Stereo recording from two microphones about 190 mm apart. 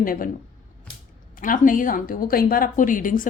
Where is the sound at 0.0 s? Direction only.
50° left (ahead or behind).